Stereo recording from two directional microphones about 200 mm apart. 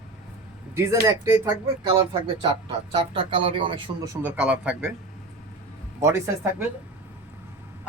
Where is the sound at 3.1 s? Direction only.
25° right (ahead or behind); by 4.9 s 10° right (ahead or behind).